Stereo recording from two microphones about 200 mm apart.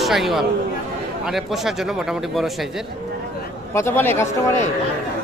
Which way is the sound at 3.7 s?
10° left (ahead or behind).